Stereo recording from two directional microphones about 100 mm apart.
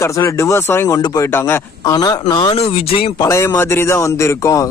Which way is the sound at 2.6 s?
85° left.